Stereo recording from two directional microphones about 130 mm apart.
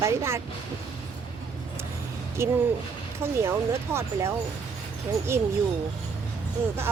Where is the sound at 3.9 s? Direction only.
20° right (ahead or behind).